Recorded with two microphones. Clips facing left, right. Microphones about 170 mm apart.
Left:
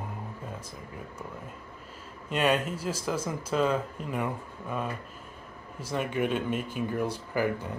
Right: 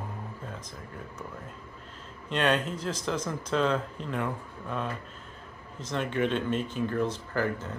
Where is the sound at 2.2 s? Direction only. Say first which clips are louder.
Left 1 dB; 5° left (ahead or behind).